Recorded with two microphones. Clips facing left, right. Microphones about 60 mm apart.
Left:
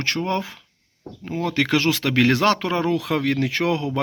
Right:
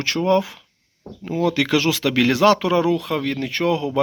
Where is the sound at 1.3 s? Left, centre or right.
Left.